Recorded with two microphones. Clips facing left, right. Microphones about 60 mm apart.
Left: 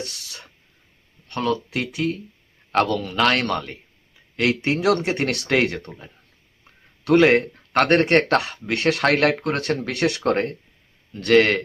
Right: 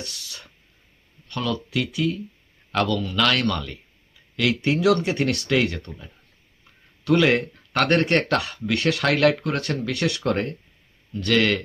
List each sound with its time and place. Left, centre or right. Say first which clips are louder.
0.3 s a sound: left 1 dB; left
1.3 s speech: left 3 dB; left
5.2 s speech: even; left
5.5 s speech: left 3 dB; left
7.0 s speech: left 4 dB; left